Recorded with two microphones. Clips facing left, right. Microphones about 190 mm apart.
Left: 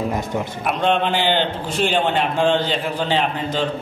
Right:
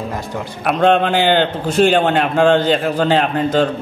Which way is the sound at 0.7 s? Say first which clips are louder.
Right 6 dB; 45° right (ahead or behind).